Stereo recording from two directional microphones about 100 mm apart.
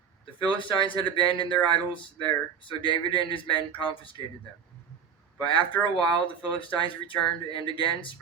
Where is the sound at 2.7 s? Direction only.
55° left (ahead or behind).